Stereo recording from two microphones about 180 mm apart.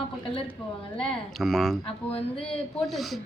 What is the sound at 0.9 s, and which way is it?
Speech, 5° left (ahead or behind).